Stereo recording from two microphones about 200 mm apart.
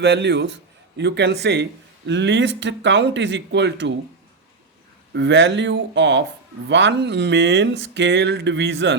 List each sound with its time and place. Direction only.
0.0 s speech: 60° right (ahead or behind)
5.1 s speech: 65° right (ahead or behind)